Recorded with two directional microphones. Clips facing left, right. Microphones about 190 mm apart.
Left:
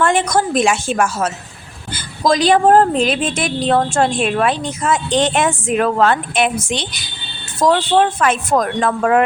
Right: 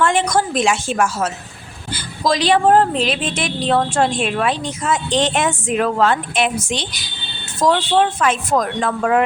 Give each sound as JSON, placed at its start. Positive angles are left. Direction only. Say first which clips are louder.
{"t": 0.0, "sound": "a woman's voice", "louder": "left 1 dB", "side_deg": 50}
{"t": 7.9, "sound": "a woman's voice", "louder": "left 2 dB", "side_deg": 55}